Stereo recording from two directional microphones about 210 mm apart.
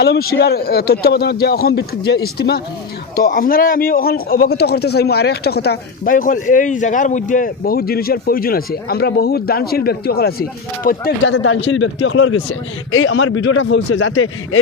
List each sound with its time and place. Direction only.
0.0 s a man's voice: 50° left (ahead or behind)
11.3 s a man's voice: 75° left (ahead or behind)